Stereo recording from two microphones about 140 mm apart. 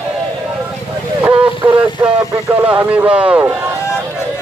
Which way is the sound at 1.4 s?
35° right (ahead or behind).